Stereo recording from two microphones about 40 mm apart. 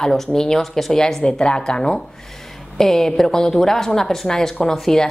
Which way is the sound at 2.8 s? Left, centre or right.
Centre.